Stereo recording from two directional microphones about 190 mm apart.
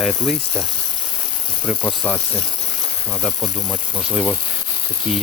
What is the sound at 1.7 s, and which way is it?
Speech, 10° left (ahead or behind).